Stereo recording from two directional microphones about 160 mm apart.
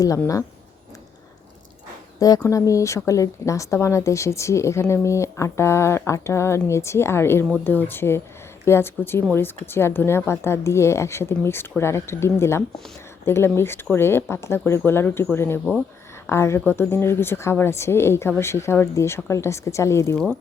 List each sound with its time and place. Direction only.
2.1 s speech: 20° left (ahead or behind)